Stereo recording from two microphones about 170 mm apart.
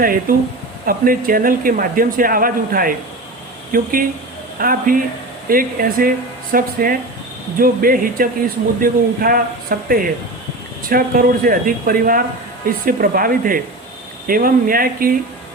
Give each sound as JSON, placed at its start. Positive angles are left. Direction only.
{"t": 0.0, "sound": "speech", "side_deg": -55}